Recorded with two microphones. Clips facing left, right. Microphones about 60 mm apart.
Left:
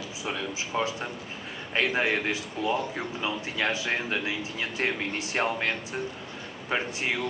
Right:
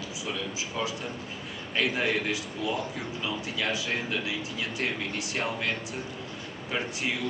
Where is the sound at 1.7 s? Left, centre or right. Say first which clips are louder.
Left 2 dB; left.